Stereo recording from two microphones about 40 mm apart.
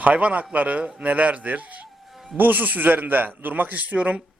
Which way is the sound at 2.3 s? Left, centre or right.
Right.